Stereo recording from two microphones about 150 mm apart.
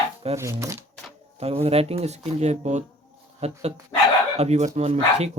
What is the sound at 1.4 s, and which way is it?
Speech, 45° right (ahead or behind).